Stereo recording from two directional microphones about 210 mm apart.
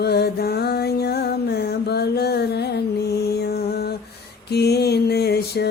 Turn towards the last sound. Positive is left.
turn(degrees=50)  # may be behind; listen again after turning